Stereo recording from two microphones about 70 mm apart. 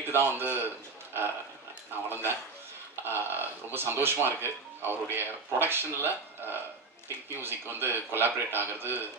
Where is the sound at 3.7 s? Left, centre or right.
Right.